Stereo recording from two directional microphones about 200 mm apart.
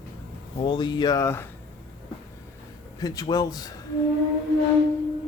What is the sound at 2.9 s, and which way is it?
Speech, 20° left (ahead or behind).